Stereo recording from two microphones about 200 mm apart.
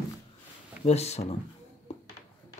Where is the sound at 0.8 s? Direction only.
30° left (ahead or behind).